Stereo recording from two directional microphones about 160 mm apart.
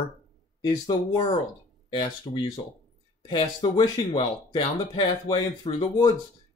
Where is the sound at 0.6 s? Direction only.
25° left (ahead or behind).